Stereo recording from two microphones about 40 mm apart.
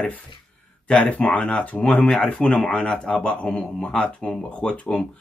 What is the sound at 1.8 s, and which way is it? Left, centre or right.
Speech, left.